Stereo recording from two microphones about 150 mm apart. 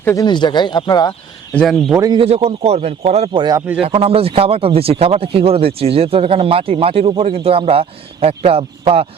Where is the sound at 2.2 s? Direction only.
45° right (ahead or behind).